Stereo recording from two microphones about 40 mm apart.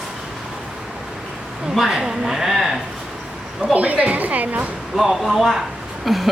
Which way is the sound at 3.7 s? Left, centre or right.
Right.